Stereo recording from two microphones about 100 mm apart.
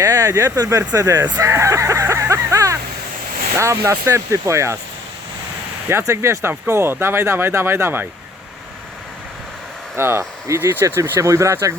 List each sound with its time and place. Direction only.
0.0 s speech: 35° right (ahead or behind)
5.9 s speech: 25° right (ahead or behind)
9.9 s speech: 25° right (ahead or behind)